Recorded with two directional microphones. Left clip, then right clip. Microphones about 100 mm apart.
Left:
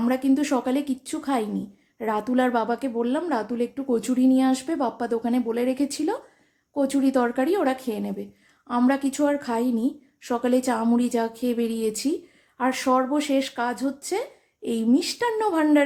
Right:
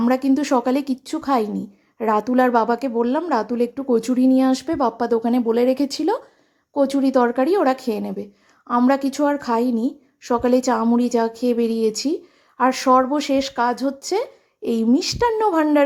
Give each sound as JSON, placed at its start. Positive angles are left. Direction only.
{"t": 0.0, "sound": "a woman's voice", "side_deg": -45}
{"t": 6.7, "sound": "a woman's voice", "side_deg": -25}
{"t": 12.5, "sound": "a woman's voice", "side_deg": -40}